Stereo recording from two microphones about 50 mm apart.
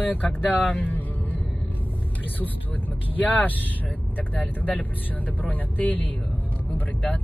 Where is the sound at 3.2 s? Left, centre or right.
Left.